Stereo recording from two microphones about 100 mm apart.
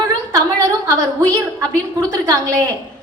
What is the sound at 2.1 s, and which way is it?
Speech, 35° right (ahead or behind).